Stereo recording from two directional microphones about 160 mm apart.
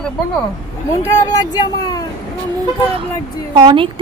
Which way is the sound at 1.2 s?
25° left (ahead or behind).